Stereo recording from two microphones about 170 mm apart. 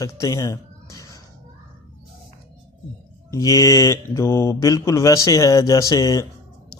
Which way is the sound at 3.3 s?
20° left (ahead or behind).